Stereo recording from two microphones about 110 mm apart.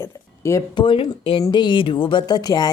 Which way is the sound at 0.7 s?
50° left (ahead or behind).